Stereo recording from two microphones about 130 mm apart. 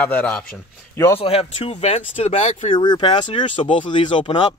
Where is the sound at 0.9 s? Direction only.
20° left (ahead or behind).